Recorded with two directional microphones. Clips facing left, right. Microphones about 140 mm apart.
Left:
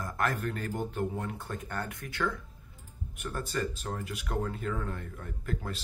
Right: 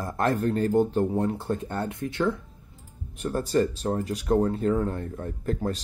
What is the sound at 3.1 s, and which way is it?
Speech, 35° right (ahead or behind).